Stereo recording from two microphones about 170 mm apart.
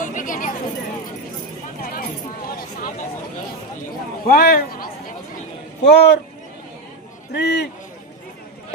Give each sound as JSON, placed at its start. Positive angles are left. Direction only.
{"t": 0.0, "sound": "chatter", "side_deg": 50}
{"t": 1.8, "sound": "a sound", "side_deg": 55}
{"t": 4.3, "sound": "speech", "side_deg": 60}
{"t": 5.8, "sound": "speech", "side_deg": 90}
{"t": 7.3, "sound": "a man's voice", "side_deg": 80}